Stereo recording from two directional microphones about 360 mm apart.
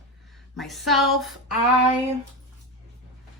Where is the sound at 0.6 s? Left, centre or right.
Centre.